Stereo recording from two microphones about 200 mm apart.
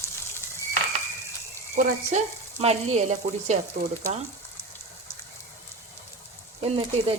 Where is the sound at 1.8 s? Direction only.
35° right (ahead or behind).